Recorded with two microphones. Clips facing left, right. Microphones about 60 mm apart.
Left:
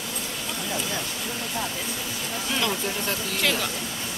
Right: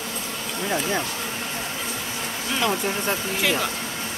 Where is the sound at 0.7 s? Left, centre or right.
Right.